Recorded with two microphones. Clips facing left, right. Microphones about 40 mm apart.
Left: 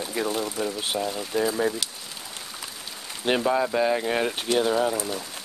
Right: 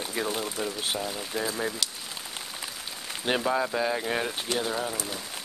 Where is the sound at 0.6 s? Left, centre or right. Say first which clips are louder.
Left 3 dB; centre.